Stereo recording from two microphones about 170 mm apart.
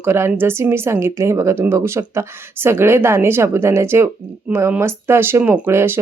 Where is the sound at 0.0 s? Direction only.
15° right (ahead or behind).